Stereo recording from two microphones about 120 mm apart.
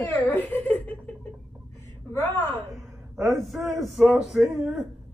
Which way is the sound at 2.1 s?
20° left (ahead or behind).